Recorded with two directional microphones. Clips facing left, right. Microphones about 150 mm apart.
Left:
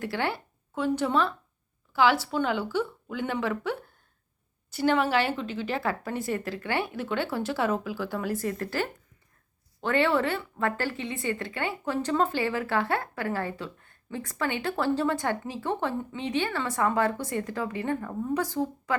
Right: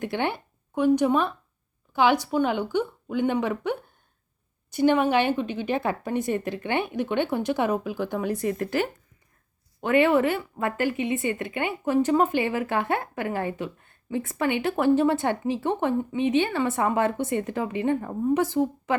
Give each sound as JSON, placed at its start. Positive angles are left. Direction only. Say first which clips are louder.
{"t": 0.0, "sound": "a woman's voice", "louder": "right 3 dB", "side_deg": -20}